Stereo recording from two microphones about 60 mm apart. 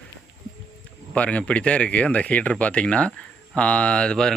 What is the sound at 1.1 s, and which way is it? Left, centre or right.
Speech, left.